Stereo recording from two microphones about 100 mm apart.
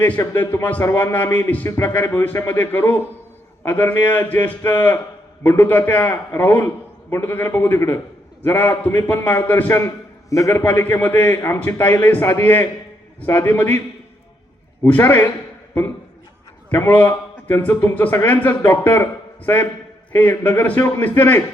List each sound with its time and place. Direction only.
0.2 s a man's voice: 20° left (ahead or behind)
9.8 s a man's voice: 35° left (ahead or behind)
10.5 s a man's voice: 20° left (ahead or behind)
14.8 s a man's voice: 20° left (ahead or behind)
16.6 s a man's voice: 15° left (ahead or behind)
20.1 s a man's voice: 20° left (ahead or behind)